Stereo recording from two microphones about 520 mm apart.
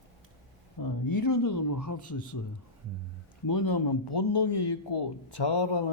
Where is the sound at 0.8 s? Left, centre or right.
Left.